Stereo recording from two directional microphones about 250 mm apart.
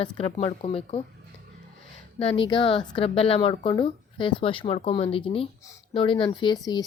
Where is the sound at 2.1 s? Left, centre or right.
Left.